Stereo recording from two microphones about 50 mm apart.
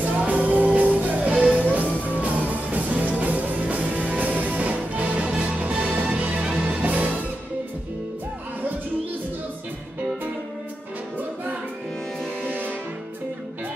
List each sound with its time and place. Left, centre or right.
0.0 s music: right
12.4 s music: right